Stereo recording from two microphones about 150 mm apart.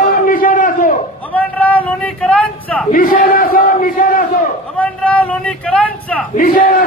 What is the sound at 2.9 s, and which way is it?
Battle cry, 75° left (ahead or behind).